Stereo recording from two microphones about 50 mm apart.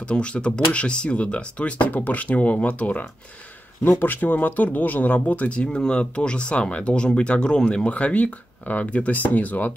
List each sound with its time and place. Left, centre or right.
0.0 s speech: left
5.6 s speech: centre; by 9.8 s left